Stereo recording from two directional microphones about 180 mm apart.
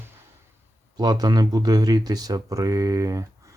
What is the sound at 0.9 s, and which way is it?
Speech, 20° right (ahead or behind).